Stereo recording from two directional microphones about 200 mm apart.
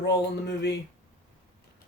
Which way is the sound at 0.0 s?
60° left (ahead or behind).